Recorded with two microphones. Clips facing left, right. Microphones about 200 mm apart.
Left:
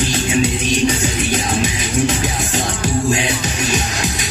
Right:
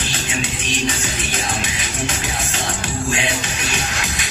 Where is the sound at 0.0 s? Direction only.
40° left (ahead or behind).